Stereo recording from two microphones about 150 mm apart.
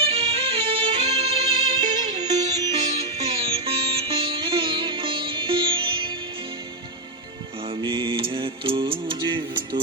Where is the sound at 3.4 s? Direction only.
40° right (ahead or behind).